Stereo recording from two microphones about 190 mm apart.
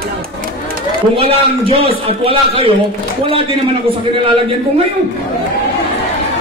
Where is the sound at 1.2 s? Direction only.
30° right (ahead or behind).